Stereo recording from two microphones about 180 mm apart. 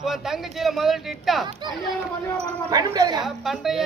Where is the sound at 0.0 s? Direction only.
Centre (ahead or behind).